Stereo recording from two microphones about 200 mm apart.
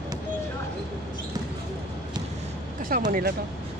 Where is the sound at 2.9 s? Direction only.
45° right (ahead or behind).